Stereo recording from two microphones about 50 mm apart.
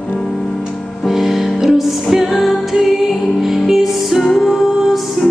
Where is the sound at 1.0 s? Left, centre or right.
Centre.